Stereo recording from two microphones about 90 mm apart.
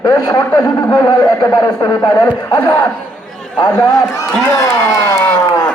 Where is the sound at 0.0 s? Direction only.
40° left (ahead or behind).